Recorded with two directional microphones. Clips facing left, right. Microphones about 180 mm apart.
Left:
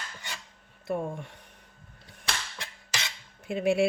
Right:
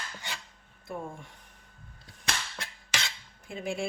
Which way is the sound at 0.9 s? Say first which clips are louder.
Left 7 dB; 70° left (ahead or behind).